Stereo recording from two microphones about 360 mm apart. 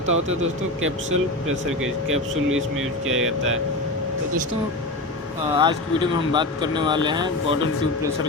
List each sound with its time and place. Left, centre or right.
0.4 s speech: right
5.5 s speech: centre